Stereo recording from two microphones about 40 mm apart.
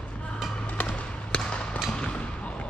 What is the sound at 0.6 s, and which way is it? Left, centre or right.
Basketball bounce, left.